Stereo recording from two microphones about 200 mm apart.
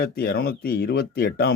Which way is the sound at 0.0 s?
50° left (ahead or behind).